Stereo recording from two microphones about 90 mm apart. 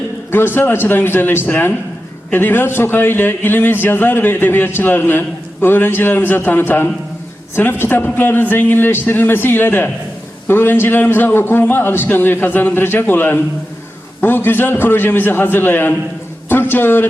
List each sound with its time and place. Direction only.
0.3 s a man's voice: 25° left (ahead or behind)